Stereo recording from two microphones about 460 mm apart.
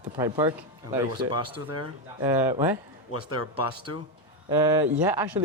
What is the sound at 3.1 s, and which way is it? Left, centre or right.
Speech, left.